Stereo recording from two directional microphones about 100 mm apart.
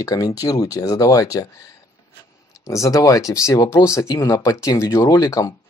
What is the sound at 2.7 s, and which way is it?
Speech, 30° left (ahead or behind).